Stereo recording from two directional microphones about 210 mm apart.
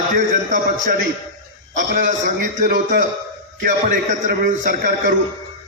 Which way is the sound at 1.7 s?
35° right (ahead or behind).